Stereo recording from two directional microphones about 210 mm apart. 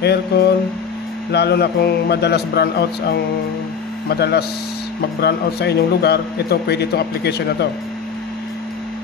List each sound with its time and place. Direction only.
0.0 s a man's voice: 50° left (ahead or behind)